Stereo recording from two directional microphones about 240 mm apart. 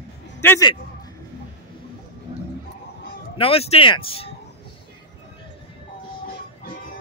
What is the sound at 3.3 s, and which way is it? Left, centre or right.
Speech, left.